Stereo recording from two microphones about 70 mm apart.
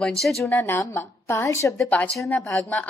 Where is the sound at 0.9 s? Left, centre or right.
Left.